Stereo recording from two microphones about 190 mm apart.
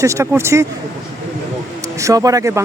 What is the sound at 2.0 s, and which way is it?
Speech, 15° right (ahead or behind).